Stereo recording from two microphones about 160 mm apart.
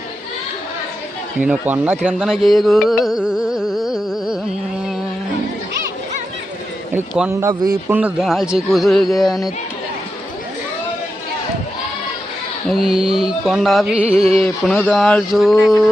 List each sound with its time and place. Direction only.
1.4 s carnatic music: 10° right (ahead or behind)
7.3 s speech: 20° right (ahead or behind)
7.9 s carnatic music: 5° right (ahead or behind)
12.6 s carnatic music: centre (ahead or behind)